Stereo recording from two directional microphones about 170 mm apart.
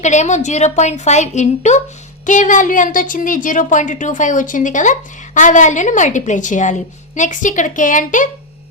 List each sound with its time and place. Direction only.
0.0 s a woman's voice: 45° left (ahead or behind)